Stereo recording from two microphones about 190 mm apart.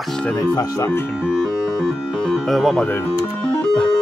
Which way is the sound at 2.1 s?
5° left (ahead or behind).